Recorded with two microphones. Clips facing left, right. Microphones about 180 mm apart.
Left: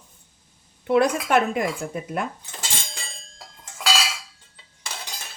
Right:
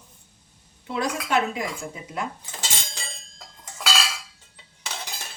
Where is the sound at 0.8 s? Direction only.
60° left (ahead or behind).